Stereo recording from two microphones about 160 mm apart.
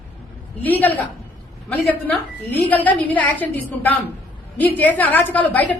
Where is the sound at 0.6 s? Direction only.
10° left (ahead or behind).